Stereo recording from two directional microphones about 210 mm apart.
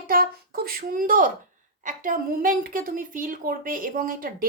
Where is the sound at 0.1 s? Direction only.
45° right (ahead or behind).